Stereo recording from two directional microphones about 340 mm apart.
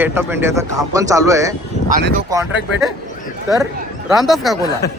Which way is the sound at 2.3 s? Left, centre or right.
Centre.